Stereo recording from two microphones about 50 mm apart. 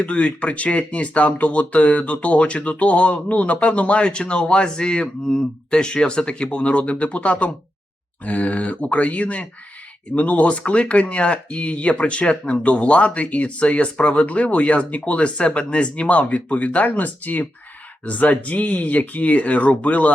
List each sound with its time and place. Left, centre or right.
0.0 s speech: left